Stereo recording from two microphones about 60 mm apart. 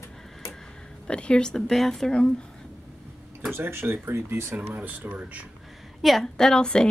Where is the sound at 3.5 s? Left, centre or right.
Right.